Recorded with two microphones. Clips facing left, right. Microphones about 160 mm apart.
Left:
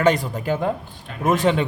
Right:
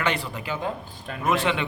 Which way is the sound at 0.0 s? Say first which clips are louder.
Left 8 dB; 40° left (ahead or behind).